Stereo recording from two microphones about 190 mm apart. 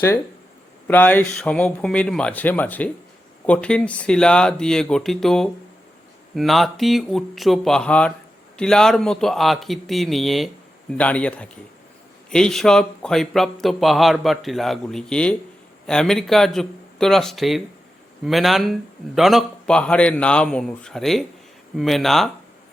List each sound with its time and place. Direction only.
0.9 s speech: 10° left (ahead or behind)